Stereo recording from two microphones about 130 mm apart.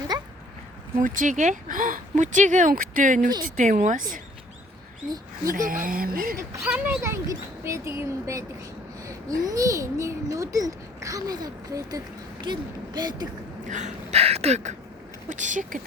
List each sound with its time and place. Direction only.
1.0 s speech: 90° right
3.4 s speech: 70° right (ahead or behind)
5.5 s speech: 90° right
6.6 s speech: 10° right (ahead or behind)
7.0 s a child's voice: 20° right (ahead or behind)
13.7 s a sound: 70° right (ahead or behind)
15.3 s speech: 75° right (ahead or behind)